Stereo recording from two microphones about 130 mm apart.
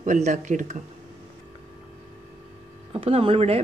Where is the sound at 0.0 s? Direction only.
75° right (ahead or behind).